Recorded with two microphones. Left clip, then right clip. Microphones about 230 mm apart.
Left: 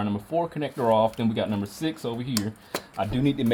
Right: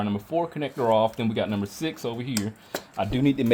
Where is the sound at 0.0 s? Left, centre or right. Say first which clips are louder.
Even; right.